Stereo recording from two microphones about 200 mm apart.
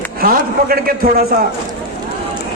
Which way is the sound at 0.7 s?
45° right (ahead or behind).